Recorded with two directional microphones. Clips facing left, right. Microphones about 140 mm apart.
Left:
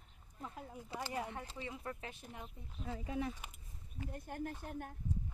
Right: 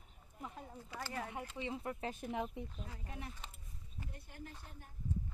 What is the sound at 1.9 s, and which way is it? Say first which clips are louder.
Speech: right 2 dB; 15° right (ahead or behind).